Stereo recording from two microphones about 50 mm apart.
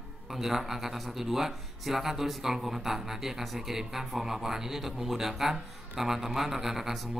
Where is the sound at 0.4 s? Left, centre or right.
Centre.